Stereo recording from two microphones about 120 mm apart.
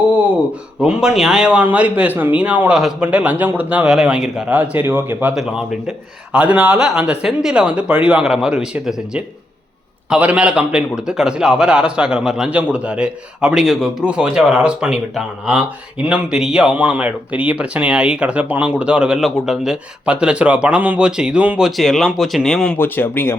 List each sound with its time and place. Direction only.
0.8 s a man's voice: 5° right (ahead or behind)
5.3 s a man's voice: 5° right (ahead or behind)
21.8 s speech: centre (ahead or behind)
22.8 s speech: 20° left (ahead or behind)